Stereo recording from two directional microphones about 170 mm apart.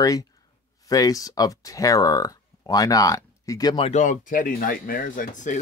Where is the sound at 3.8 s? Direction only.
45° left (ahead or behind).